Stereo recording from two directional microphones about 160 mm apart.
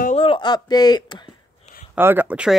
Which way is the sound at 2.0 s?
15° right (ahead or behind).